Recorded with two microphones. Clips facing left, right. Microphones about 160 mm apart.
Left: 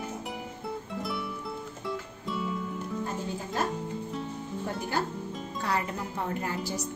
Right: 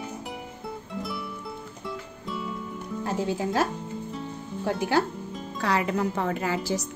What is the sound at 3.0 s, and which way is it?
Speech, 90° right.